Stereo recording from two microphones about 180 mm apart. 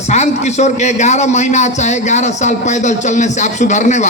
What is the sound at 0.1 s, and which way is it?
A man's voice, 40° left (ahead or behind).